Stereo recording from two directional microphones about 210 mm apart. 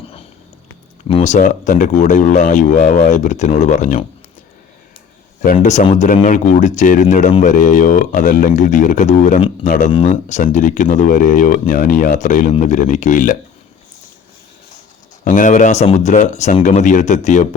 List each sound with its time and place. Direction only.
1.0 s speech: 30° left (ahead or behind)
5.5 s speech: 35° left (ahead or behind)
15.2 s speech: 40° left (ahead or behind)